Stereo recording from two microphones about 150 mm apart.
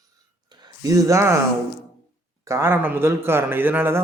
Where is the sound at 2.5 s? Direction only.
15° right (ahead or behind).